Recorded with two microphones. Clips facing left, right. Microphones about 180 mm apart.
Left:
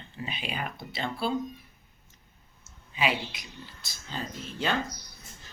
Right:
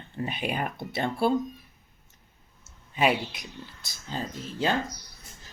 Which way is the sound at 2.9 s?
50° right (ahead or behind).